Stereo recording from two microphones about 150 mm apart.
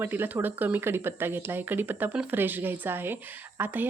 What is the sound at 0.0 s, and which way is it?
Speech, 15° right (ahead or behind).